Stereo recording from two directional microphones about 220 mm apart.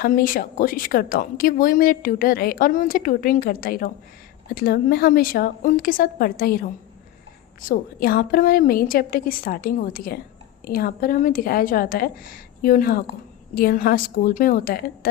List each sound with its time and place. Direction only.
0.0 s a woman's voice: 40° left (ahead or behind)